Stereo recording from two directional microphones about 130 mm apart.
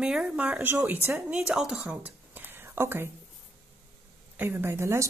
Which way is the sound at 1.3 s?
5° right (ahead or behind).